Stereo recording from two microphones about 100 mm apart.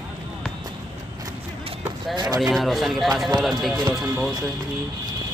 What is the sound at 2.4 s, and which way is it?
Speech, centre (ahead or behind).